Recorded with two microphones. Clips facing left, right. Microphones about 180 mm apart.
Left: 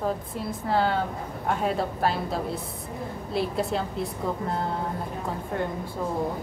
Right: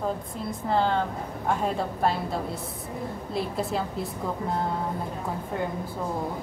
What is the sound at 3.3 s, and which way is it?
Speech, centre (ahead or behind).